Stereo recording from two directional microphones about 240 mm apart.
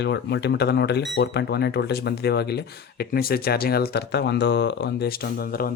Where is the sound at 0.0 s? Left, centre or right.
Left.